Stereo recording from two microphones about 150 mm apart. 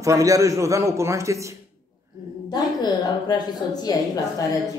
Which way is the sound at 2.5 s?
25° left (ahead or behind).